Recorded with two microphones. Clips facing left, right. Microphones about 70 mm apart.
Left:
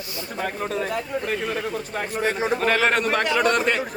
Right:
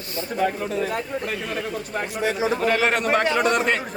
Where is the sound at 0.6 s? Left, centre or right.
Left.